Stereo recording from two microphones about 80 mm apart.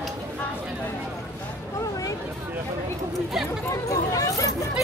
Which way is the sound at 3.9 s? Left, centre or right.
Left.